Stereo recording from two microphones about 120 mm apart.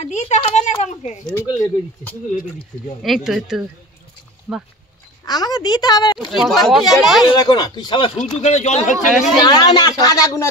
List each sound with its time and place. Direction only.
0.0 s speech: 70° left (ahead or behind)
0.4 s a sound: 70° left (ahead or behind)
1.3 s speech: 20° left (ahead or behind)
3.0 s speech: centre (ahead or behind)
5.2 s speech: 35° left (ahead or behind)
6.1 s speech: centre (ahead or behind)
7.2 s speech: 35° left (ahead or behind)
8.2 s speech: 70° left (ahead or behind)
9.5 s speech: 35° left (ahead or behind)